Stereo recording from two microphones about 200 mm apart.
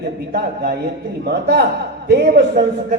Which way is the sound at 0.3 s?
55° right (ahead or behind).